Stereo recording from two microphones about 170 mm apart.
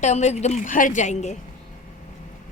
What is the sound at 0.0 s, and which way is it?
A woman's voice, 45° left (ahead or behind).